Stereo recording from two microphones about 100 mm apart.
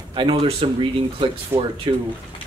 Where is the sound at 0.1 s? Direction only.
55° right (ahead or behind); by 0.7 s 75° right (ahead or behind).